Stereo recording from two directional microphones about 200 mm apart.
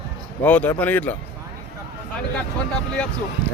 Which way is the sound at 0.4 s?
5° left (ahead or behind).